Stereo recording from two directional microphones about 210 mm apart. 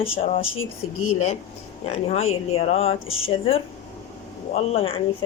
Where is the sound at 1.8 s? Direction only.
30° left (ahead or behind).